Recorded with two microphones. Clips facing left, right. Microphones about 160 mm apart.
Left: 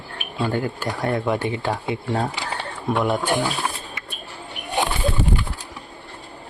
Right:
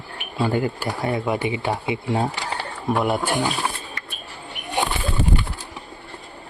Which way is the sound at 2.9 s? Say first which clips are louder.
Even; 5° right (ahead or behind).